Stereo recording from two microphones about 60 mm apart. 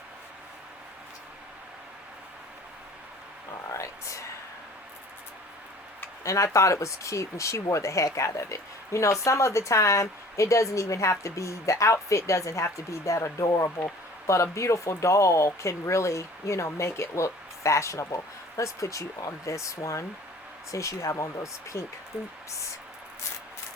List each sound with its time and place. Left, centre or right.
3.7 s a sound: left
6.2 s speech: left
13.7 s speech: left